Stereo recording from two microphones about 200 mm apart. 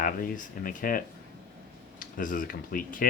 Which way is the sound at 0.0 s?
45° left (ahead or behind).